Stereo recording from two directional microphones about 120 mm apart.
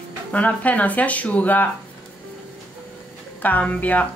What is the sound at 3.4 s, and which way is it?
Speech, 15° left (ahead or behind).